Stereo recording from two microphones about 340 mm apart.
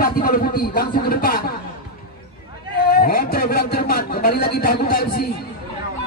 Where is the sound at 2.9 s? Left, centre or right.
Left.